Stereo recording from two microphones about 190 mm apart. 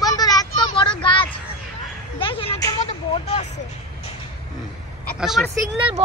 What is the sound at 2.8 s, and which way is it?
Vehicle, 35° left (ahead or behind).